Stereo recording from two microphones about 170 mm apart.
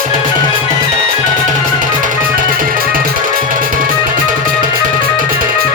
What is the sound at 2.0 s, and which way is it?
Music, 50° right (ahead or behind).